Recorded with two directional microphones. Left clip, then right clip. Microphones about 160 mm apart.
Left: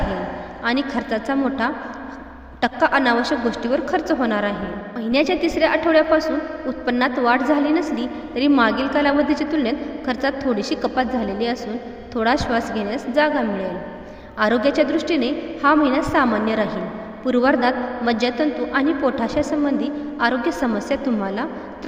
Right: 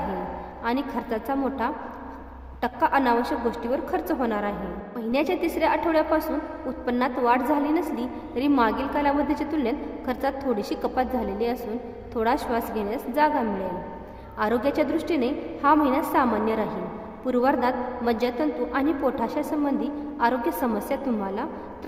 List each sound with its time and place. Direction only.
0.6 s a woman's voice: 15° left (ahead or behind)